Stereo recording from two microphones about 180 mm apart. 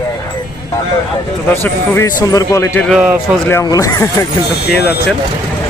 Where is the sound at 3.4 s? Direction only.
15° left (ahead or behind).